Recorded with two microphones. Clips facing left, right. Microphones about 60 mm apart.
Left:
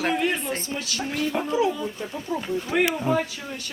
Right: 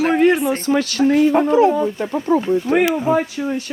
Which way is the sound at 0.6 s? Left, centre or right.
Right.